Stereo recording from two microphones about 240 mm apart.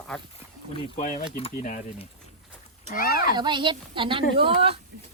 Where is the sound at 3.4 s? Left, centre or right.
Centre.